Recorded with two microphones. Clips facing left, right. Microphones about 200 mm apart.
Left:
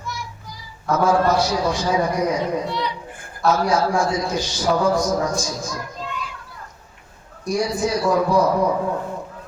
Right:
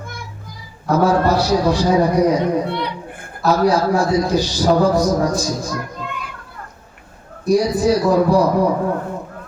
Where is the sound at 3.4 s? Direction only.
35° right (ahead or behind).